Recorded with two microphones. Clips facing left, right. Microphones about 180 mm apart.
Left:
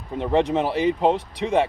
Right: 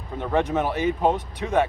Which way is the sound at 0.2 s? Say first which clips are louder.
Left 3 dB; 30° left (ahead or behind).